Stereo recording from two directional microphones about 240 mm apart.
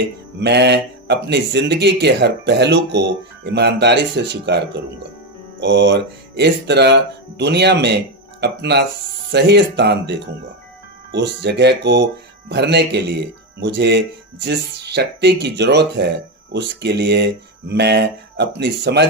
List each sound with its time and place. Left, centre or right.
0.3 s speech: right